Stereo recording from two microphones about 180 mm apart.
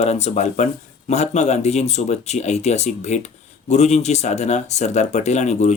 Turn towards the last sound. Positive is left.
turn(degrees=40)  # may be behind; listen again after turning